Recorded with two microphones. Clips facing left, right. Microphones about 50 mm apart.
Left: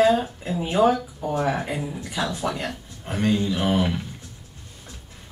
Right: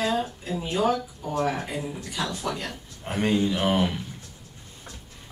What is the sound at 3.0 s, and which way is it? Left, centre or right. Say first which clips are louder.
Speech: left 1 dB; centre.